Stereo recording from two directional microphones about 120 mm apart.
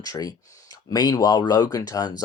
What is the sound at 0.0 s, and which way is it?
Speech, 30° left (ahead or behind).